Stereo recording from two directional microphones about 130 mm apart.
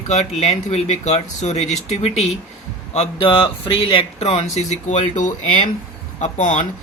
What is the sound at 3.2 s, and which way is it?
Speech, 40° left (ahead or behind).